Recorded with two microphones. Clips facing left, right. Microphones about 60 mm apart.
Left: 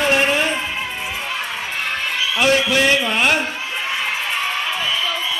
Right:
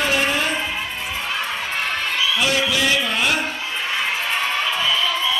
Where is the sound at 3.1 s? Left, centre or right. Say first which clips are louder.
Left 3 dB; left.